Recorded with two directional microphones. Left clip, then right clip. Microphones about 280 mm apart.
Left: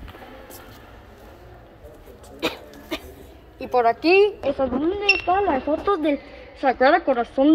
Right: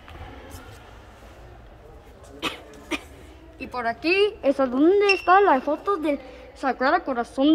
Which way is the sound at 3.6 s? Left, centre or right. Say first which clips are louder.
Left 8 dB; centre.